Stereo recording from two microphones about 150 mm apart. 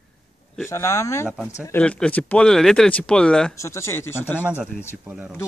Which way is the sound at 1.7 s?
5° left (ahead or behind).